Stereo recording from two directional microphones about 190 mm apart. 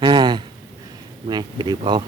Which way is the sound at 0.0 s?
25° right (ahead or behind).